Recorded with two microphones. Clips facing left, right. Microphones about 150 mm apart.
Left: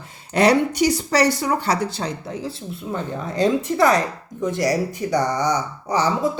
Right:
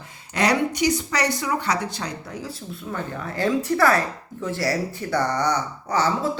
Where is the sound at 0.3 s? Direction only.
30° left (ahead or behind).